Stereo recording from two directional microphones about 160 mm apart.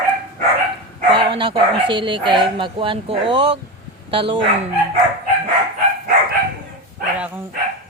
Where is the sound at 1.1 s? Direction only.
30° right (ahead or behind).